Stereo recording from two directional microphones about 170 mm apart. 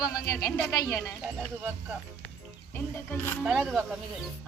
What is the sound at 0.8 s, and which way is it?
Speech, 15° left (ahead or behind).